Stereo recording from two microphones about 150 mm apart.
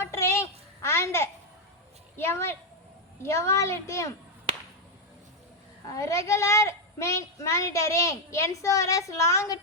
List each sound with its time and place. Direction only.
0.0 s a sound: 15° left (ahead or behind)
3.2 s a woman's voice: 20° left (ahead or behind)
4.5 s whip: 35° right (ahead or behind)
5.9 s a woman's voice: 20° left (ahead or behind)